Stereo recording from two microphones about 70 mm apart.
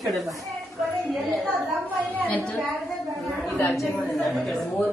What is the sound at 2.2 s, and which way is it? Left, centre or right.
Speech, centre.